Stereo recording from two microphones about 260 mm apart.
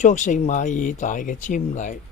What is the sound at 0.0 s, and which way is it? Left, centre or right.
Speech, left.